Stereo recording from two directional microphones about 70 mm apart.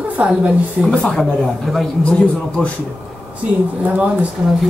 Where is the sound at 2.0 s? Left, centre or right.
Centre.